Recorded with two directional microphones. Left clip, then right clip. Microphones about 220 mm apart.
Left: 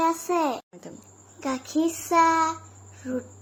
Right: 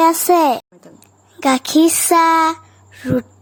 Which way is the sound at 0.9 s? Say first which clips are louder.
Right 10 dB; 45° right (ahead or behind).